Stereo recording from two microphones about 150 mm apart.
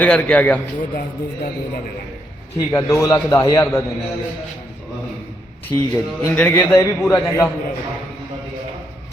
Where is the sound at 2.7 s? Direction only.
20° left (ahead or behind).